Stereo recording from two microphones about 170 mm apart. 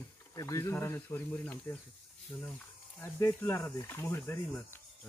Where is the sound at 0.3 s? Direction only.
20° left (ahead or behind).